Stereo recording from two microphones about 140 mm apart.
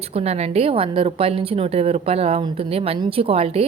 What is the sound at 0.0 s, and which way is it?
A woman's voice, 45° right (ahead or behind).